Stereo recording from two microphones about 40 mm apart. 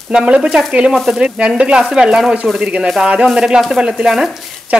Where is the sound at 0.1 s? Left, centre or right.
Right.